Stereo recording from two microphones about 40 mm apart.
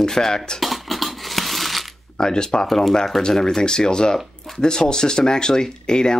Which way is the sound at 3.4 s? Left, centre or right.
Centre.